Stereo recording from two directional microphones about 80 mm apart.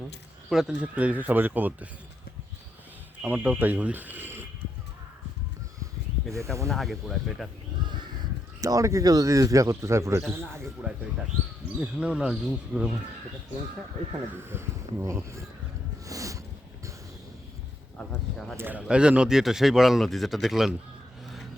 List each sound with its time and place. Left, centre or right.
0.7 s speech: centre
3.2 s speech: centre
6.3 s speech: right
6.7 s speech: centre
7.8 s crow: right
8.6 s speech: right
10.9 s speech: centre
14.4 s speech: right
16.0 s a sound: right
18.5 s speech: right
18.8 s speech: centre